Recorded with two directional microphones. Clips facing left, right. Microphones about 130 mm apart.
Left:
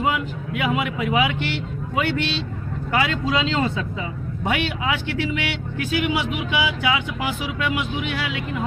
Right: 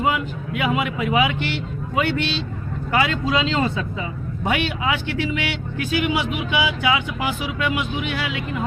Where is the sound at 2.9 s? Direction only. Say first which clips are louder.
Right 1 dB; 25° right (ahead or behind).